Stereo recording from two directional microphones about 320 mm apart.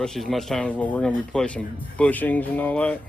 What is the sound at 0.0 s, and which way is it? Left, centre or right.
Speech, centre.